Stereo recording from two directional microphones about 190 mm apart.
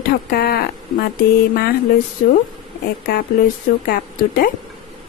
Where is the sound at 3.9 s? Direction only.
50° left (ahead or behind).